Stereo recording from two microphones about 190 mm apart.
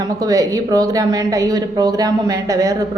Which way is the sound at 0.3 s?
20° right (ahead or behind).